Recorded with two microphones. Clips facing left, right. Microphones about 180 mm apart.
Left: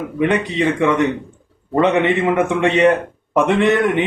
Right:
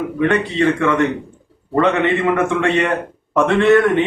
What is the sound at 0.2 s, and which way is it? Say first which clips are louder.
A man's voice: even; 15° left (ahead or behind).